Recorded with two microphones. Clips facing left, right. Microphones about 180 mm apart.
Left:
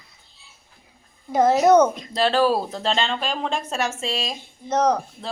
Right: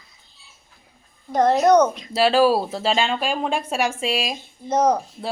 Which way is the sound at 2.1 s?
10° right (ahead or behind).